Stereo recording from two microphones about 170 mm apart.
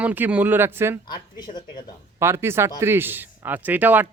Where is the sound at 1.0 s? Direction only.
25° left (ahead or behind).